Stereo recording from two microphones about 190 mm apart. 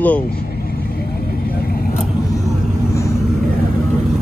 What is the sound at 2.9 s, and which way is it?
Vehicle, 15° left (ahead or behind).